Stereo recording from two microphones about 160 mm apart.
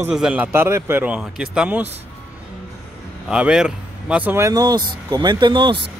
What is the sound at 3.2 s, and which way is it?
Speech, 5° right (ahead or behind).